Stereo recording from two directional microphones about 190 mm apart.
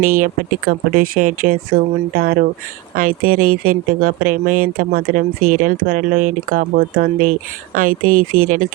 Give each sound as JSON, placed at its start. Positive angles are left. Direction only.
{"t": 0.0, "sound": "speech", "side_deg": -45}